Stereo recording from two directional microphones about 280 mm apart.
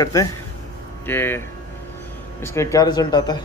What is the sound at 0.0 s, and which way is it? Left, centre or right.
Speech, centre.